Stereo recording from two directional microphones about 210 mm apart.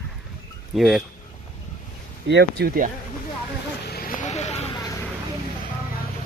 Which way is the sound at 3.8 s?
45° left (ahead or behind).